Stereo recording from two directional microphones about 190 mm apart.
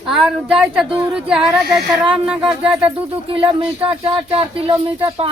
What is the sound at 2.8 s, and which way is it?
Speech, 30° right (ahead or behind).